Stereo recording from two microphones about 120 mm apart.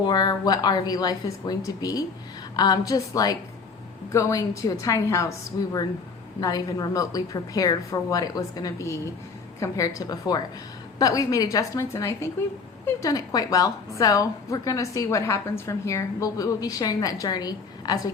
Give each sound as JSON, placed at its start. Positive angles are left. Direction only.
{"t": 0.0, "sound": "a woman's voice", "side_deg": 35}